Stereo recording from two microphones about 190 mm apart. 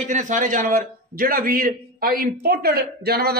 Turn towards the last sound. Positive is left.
turn(degrees=-55)  # may be behind; listen again after turning